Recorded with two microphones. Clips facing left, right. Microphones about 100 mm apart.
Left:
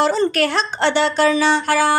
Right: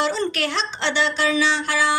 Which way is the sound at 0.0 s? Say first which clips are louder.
Left 6 dB; 45° left (ahead or behind).